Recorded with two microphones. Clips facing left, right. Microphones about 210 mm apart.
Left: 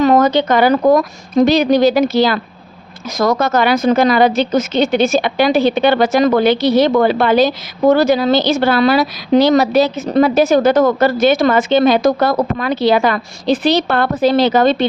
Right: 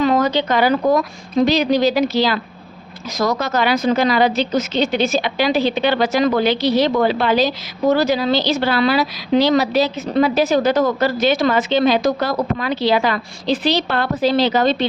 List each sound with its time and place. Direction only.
0.0 s speech: 50° left (ahead or behind)